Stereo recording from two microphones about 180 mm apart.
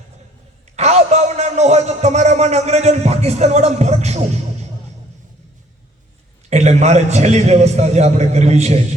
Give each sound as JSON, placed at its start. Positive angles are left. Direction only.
{"t": 0.8, "sound": "a man's voice", "side_deg": -40}
{"t": 6.5, "sound": "a man's voice", "side_deg": -40}